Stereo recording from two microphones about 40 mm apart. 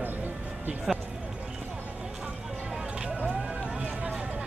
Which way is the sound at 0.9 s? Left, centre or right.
Centre.